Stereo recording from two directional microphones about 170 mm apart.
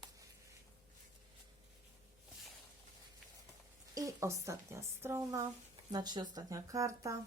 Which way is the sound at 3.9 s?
20° right (ahead or behind).